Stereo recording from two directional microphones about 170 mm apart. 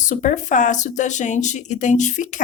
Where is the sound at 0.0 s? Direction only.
45° left (ahead or behind).